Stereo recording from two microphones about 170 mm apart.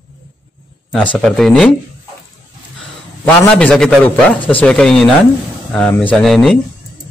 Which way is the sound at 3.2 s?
10° left (ahead or behind).